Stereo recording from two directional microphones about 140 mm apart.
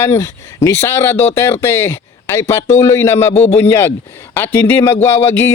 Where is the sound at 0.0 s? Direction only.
20° left (ahead or behind).